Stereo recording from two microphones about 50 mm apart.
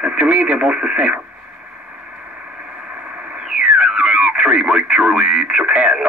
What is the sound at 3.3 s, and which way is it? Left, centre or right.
Speech, right.